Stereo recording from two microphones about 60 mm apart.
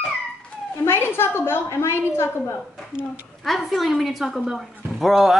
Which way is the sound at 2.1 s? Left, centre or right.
Left.